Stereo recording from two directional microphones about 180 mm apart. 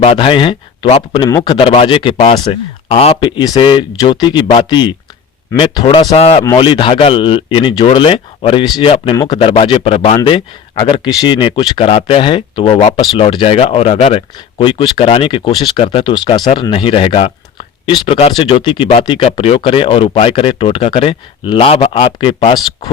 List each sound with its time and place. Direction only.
0.0 s speech: 30° left (ahead or behind)